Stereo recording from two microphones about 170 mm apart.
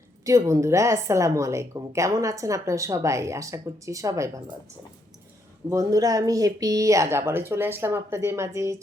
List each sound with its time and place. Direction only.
0.3 s a woman's voice: 20° right (ahead or behind)
5.6 s speech: 20° right (ahead or behind)